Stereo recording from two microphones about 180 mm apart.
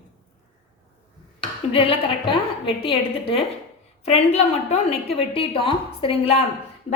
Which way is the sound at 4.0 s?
35° left (ahead or behind).